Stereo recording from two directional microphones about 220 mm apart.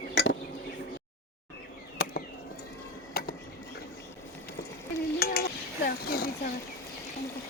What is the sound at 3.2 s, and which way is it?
Dishes, 45° left (ahead or behind).